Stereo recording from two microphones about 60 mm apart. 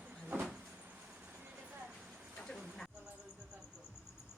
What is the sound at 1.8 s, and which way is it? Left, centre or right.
Vehicle, centre.